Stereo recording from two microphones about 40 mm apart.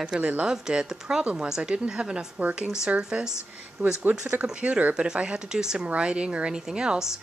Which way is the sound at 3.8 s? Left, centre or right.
Right.